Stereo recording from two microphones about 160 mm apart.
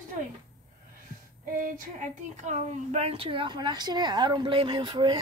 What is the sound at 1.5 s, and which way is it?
A woman's voice, 60° right (ahead or behind).